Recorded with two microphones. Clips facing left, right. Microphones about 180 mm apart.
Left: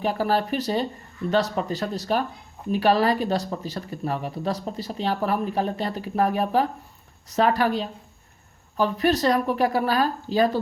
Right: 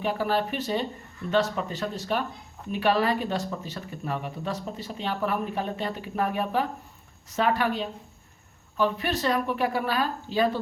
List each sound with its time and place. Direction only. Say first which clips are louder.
0.0 s speech: left 3 dB; 40° left (ahead or behind)